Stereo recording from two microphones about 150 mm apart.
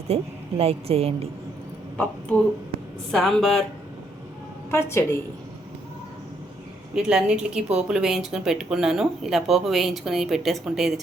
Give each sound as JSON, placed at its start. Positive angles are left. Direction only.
{"t": 0.1, "sound": "a woman's voice", "side_deg": -40}
{"t": 3.1, "sound": "speech", "side_deg": 5}
{"t": 4.7, "sound": "a woman's voice", "side_deg": 20}
{"t": 6.9, "sound": "speech", "side_deg": -5}